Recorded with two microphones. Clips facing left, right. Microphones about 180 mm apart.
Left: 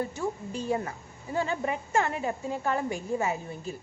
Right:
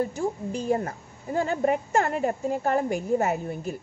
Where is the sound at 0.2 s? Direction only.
45° right (ahead or behind).